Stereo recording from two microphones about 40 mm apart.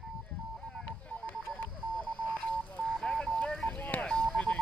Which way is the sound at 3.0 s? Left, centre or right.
Centre.